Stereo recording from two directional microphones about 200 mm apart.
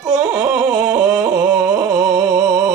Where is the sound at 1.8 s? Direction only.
20° right (ahead or behind).